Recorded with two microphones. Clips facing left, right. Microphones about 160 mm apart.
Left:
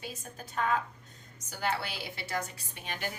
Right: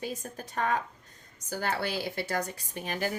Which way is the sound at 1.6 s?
45° right (ahead or behind).